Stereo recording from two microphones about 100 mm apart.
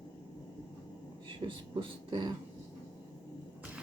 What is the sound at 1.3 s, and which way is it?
Speech, 55° right (ahead or behind).